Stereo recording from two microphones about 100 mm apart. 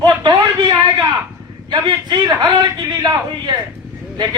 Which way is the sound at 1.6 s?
50° right (ahead or behind).